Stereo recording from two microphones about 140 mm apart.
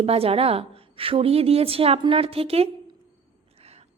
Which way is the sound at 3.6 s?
45° right (ahead or behind).